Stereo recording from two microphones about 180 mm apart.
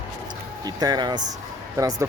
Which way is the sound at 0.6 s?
20° right (ahead or behind).